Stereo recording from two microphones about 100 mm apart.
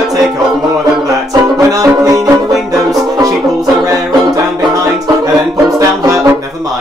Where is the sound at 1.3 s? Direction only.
35° right (ahead or behind).